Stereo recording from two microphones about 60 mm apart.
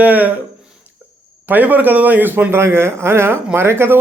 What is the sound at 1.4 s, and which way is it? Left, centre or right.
A man's voice, right.